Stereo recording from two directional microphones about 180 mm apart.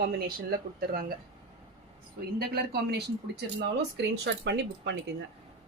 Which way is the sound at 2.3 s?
60° right (ahead or behind).